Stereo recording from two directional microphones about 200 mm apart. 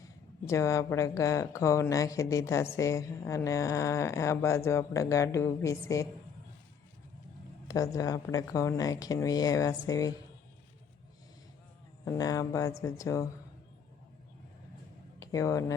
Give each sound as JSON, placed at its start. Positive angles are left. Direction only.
{"t": 0.0, "sound": "speech", "side_deg": 15}
{"t": 7.7, "sound": "speech", "side_deg": 15}
{"t": 12.0, "sound": "speech", "side_deg": 20}
{"t": 15.2, "sound": "speech", "side_deg": 15}